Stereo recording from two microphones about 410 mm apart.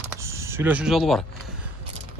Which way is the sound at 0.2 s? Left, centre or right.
Centre.